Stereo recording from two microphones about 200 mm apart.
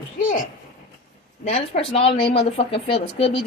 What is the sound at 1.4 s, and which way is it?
A woman's voice, 35° left (ahead or behind).